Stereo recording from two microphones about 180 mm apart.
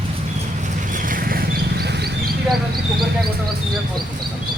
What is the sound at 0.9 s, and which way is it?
Vehicle, 50° right (ahead or behind).